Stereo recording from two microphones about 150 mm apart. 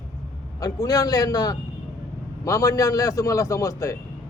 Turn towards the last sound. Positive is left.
turn(degrees=20)  # may be behind; listen again after turning